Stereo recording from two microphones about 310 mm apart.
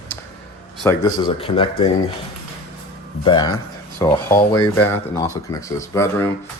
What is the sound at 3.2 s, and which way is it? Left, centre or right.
Speech, centre.